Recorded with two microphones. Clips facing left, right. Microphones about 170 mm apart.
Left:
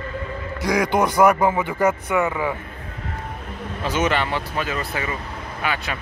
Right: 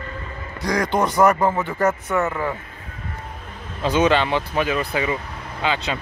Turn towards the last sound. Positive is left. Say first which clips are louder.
# right 2 dB
turn(degrees=-20)  # may be behind; listen again after turning